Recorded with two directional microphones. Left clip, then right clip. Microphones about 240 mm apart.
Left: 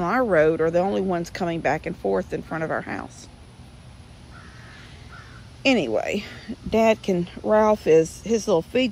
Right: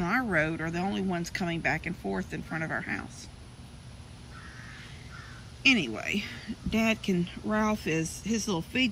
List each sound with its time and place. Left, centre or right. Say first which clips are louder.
0.0 s speech: left 9 dB; centre
5.6 s speech: left 4 dB; centre